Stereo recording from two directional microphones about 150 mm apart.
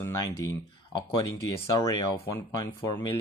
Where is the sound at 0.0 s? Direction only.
20° left (ahead or behind).